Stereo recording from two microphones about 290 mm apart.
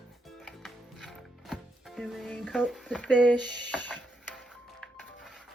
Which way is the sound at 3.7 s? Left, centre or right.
Centre.